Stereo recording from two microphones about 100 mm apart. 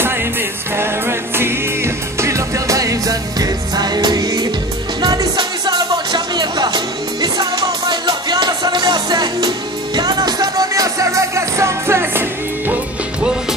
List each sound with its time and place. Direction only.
0.0 s music: 20° right (ahead or behind)